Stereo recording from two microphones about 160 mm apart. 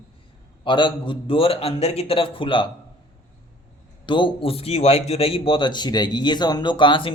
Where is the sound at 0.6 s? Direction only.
30° left (ahead or behind).